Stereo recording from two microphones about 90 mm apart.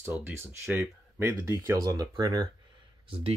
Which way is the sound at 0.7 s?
20° right (ahead or behind).